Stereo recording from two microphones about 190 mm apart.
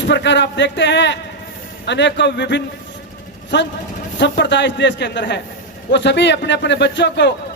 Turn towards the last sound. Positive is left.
turn(degrees=70)  # may be behind; listen again after turning